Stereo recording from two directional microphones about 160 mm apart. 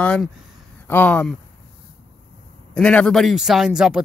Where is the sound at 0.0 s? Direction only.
5° left (ahead or behind).